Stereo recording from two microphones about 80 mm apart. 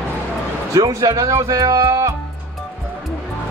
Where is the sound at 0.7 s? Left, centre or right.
Right.